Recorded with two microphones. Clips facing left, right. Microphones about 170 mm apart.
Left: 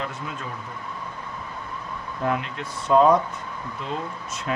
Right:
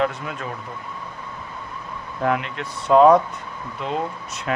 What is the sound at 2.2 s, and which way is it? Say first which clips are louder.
Speech: right 3 dB; 70° right (ahead or behind).